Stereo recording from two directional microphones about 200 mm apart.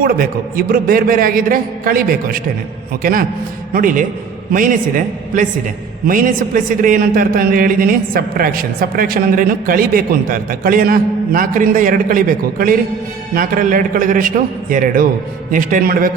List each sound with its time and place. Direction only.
0.0 s a man's voice: 45° right (ahead or behind)